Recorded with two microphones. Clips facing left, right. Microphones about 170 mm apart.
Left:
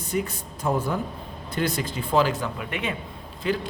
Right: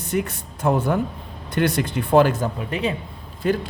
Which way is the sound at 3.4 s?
45° right (ahead or behind).